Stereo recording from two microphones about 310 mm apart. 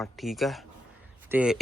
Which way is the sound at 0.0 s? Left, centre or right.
Centre.